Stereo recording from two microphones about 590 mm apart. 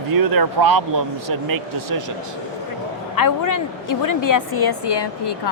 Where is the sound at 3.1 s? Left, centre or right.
Left.